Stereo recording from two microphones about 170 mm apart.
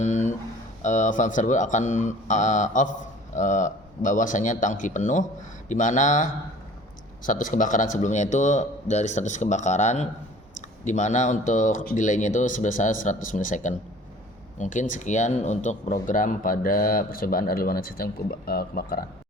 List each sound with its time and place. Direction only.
0.0 s a man's voice: 45° left (ahead or behind); by 19.0 s 60° left (ahead or behind)